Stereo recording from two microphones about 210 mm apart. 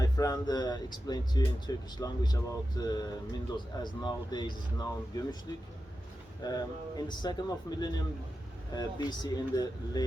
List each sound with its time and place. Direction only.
0.0 s speech: 15° left (ahead or behind)
6.4 s speech: 20° left (ahead or behind)